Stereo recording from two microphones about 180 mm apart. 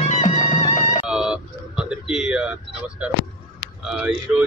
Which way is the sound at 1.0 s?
5° right (ahead or behind).